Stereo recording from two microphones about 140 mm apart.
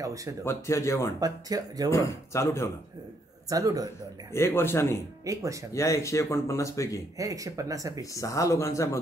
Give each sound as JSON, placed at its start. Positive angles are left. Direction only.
{"t": 0.0, "sound": "speech", "side_deg": -25}
{"t": 0.5, "sound": "speech", "side_deg": 20}
{"t": 1.2, "sound": "speech", "side_deg": -25}
{"t": 1.9, "sound": "speech", "side_deg": 20}
{"t": 3.4, "sound": "speech", "side_deg": -25}
{"t": 4.3, "sound": "a man's voice", "side_deg": 15}
{"t": 5.2, "sound": "speech", "side_deg": -25}
{"t": 5.7, "sound": "speech", "side_deg": 20}
{"t": 7.2, "sound": "speech", "side_deg": -25}
{"t": 8.0, "sound": "speech", "side_deg": 25}